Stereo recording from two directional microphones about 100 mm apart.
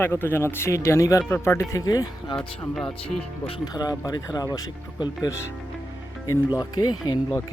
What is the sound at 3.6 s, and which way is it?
Speech, 40° left (ahead or behind).